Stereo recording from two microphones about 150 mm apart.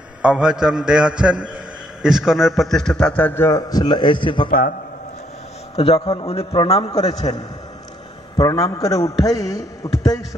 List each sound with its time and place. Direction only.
0.2 s a man's voice: 5° right (ahead or behind); by 4.5 s 30° left (ahead or behind)
4.5 s a man's voice: 75° left (ahead or behind)
5.8 s a man's voice: 40° left (ahead or behind)
7.2 s speech: 25° left (ahead or behind)